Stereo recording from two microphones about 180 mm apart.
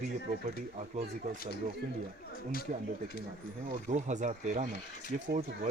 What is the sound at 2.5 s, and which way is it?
Speech, 55° left (ahead or behind).